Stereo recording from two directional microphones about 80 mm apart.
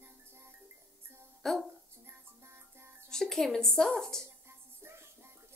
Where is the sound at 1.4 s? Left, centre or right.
Centre.